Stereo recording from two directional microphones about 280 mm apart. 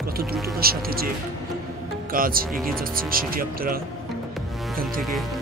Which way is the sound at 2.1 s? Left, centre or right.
Right.